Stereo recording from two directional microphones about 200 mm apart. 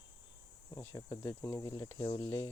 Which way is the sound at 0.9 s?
20° left (ahead or behind).